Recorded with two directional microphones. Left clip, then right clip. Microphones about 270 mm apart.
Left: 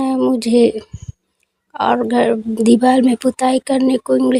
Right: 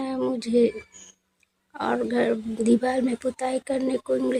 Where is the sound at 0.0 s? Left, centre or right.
Left.